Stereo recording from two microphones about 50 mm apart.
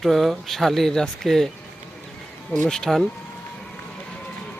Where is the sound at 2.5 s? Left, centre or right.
Left.